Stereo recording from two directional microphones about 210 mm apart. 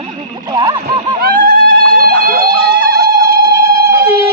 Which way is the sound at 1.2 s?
45° right (ahead or behind).